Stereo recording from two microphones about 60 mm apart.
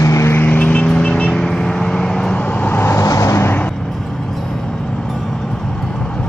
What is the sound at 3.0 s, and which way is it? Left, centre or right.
Vehicle, left.